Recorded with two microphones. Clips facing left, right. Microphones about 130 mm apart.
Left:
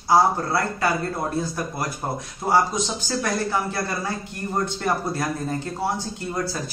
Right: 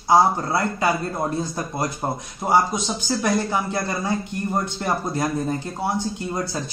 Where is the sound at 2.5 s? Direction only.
15° right (ahead or behind).